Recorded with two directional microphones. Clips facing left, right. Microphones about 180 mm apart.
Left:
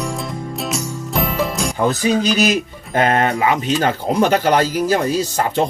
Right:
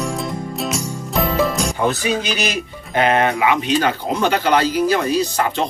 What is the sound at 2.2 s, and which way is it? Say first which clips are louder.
Speech: left 6 dB; 40° left (ahead or behind).